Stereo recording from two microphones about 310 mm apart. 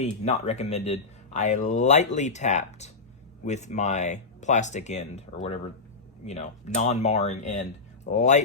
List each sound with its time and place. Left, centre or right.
0.0 s speech: left